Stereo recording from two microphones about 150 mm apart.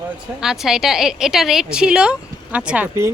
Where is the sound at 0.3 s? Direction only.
Centre (ahead or behind).